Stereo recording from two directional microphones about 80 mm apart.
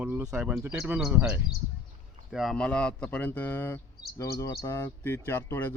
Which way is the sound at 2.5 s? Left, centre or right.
Centre.